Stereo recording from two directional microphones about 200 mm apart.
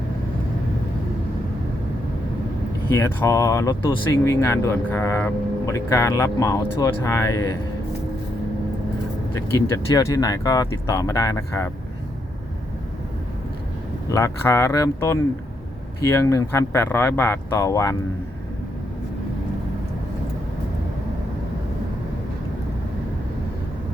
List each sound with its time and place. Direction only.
2.9 s speech: 15° left (ahead or behind)
9.6 s speech: 15° left (ahead or behind)
14.1 s speech: 15° left (ahead or behind)